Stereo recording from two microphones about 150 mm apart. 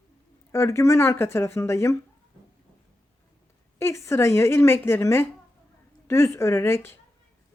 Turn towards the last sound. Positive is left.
turn(degrees=15)  # may be behind; listen again after turning